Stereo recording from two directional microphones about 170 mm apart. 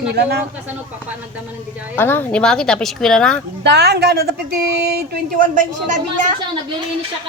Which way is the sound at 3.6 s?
85° right.